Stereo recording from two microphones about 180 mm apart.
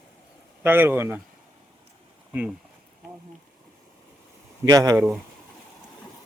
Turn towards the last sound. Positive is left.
turn(degrees=-15)  # may be behind; listen again after turning